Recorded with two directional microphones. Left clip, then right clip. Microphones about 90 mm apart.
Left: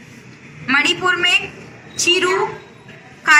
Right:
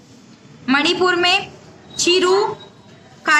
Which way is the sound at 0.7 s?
40° right (ahead or behind).